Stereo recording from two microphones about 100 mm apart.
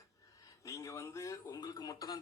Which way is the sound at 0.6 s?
30° left (ahead or behind).